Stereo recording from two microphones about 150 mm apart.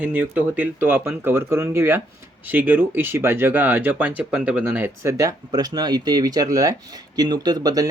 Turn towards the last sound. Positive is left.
turn(degrees=-25)  # may be behind; listen again after turning